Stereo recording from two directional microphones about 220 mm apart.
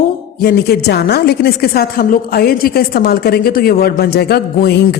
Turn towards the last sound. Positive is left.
turn(degrees=45)  # may be behind; listen again after turning